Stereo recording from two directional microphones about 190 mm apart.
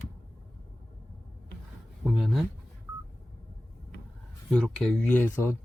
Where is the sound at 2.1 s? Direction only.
Centre (ahead or behind).